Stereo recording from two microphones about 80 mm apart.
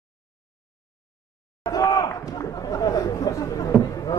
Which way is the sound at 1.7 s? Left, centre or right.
Left.